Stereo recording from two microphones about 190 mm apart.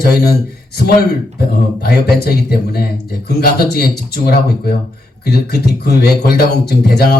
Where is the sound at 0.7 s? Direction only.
55° left (ahead or behind).